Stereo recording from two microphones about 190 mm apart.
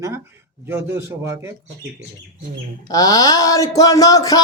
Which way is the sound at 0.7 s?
15° right (ahead or behind).